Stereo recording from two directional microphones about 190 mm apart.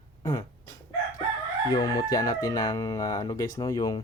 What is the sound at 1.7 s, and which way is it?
Speech, 20° left (ahead or behind).